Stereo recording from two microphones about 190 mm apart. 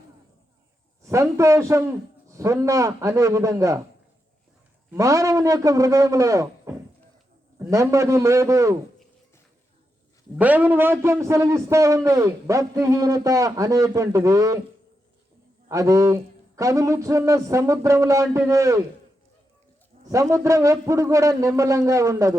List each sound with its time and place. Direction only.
1.0 s a man's voice: 15° right (ahead or behind)
4.9 s a man's voice: 15° right (ahead or behind)
10.3 s a man's voice: 10° right (ahead or behind)
15.7 s a man's voice: 15° right (ahead or behind)
20.1 s a man's voice: 15° right (ahead or behind)